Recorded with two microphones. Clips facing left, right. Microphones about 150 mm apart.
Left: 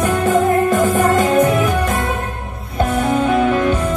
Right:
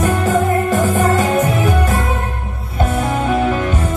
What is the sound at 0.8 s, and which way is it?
Music, 40° left (ahead or behind).